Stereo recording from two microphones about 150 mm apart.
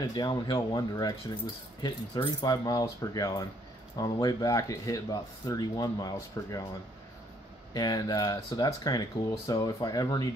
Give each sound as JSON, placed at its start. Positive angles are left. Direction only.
{"t": 0.1, "sound": "speech", "side_deg": 30}
{"t": 7.7, "sound": "speech", "side_deg": 25}